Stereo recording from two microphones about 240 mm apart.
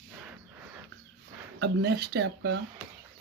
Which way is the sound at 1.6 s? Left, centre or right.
Right.